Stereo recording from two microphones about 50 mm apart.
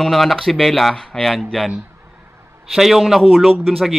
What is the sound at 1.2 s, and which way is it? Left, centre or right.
Speech, centre.